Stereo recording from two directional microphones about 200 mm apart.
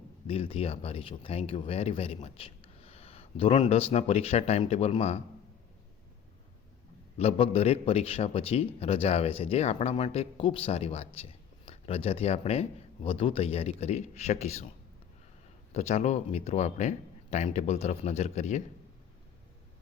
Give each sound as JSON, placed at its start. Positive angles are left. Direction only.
{"t": 0.3, "sound": "a man's voice", "side_deg": 30}
{"t": 7.2, "sound": "a man's voice", "side_deg": 30}
{"t": 15.7, "sound": "a man's voice", "side_deg": 35}